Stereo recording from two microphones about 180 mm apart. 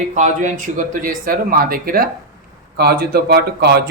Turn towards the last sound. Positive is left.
turn(degrees=-65)  # may be behind; listen again after turning